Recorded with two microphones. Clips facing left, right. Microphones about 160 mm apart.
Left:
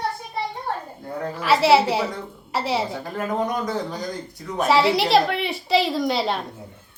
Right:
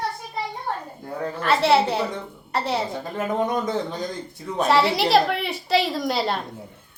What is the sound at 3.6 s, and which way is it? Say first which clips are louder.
Speech: right 1 dB; 25° right (ahead or behind).